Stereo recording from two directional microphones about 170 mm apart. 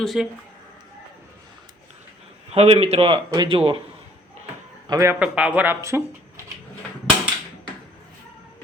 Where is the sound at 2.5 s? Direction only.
35° right (ahead or behind).